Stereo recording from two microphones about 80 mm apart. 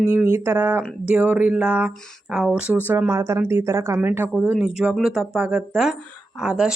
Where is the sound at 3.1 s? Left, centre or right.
Right.